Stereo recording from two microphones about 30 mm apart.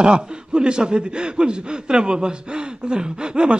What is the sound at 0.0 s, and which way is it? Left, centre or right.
Speech, right.